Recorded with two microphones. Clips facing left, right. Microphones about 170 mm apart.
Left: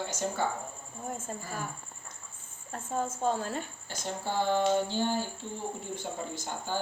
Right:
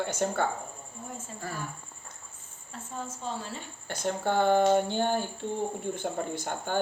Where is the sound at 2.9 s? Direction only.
50° left (ahead or behind).